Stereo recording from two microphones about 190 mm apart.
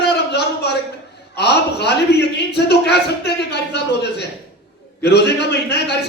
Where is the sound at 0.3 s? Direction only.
60° left (ahead or behind).